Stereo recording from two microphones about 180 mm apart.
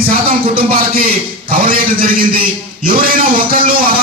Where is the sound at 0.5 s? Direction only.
55° right (ahead or behind).